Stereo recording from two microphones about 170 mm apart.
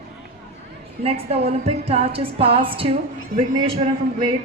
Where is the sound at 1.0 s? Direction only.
35° right (ahead or behind).